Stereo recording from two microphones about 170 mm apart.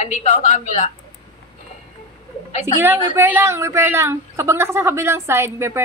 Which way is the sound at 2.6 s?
10° right (ahead or behind).